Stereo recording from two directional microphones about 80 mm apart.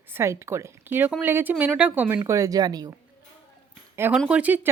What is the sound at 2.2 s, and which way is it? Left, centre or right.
Speech, right.